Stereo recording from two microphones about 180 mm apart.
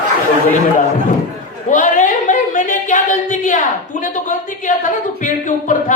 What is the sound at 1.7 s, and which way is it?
Speech, 45° left (ahead or behind).